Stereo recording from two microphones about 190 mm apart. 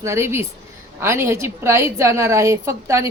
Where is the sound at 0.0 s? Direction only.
15° right (ahead or behind).